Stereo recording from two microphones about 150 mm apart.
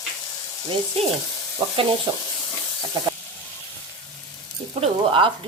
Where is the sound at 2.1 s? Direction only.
30° right (ahead or behind).